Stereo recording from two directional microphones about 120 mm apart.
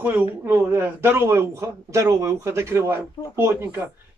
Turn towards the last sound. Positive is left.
turn(degrees=-20)  # may be behind; listen again after turning